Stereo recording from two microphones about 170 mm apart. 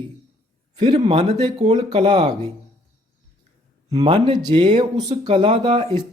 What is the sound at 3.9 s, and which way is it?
Speech, 35° right (ahead or behind).